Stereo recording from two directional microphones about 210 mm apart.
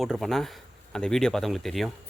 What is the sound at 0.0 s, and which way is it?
Speech, centre (ahead or behind).